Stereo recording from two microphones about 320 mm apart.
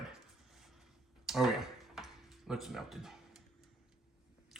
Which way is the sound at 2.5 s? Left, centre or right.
Centre.